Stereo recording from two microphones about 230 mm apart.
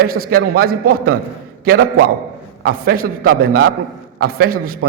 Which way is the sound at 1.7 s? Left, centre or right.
Right.